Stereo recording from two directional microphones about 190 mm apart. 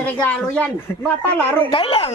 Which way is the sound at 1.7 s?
30° left (ahead or behind).